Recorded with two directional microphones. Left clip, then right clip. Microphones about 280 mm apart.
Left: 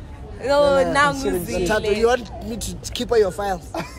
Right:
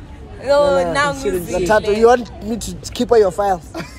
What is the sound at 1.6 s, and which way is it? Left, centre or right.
Speech, centre.